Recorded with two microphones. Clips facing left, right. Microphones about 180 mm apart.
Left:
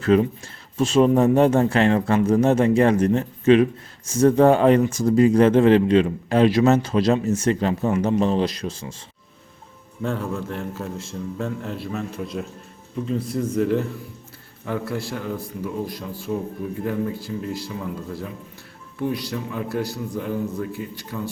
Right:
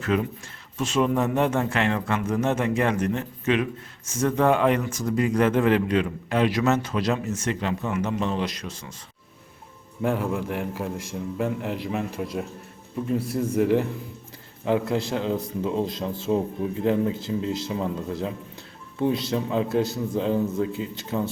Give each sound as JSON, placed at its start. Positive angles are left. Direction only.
{"t": 0.0, "sound": "a man's voice", "side_deg": 35}
{"t": 10.0, "sound": "a man's voice", "side_deg": -15}